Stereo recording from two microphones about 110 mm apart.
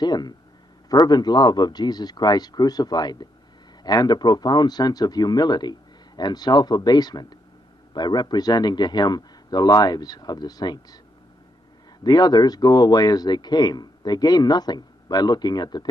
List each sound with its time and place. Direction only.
0.0 s speech: 40° left (ahead or behind)
12.0 s speech: 40° left (ahead or behind)